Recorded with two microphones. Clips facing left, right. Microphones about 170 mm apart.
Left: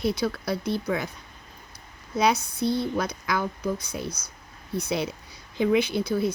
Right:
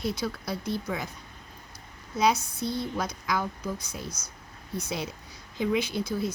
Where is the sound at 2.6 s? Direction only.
65° left (ahead or behind).